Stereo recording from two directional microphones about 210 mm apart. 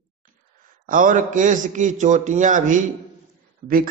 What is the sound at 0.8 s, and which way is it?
A man's voice, 40° right (ahead or behind).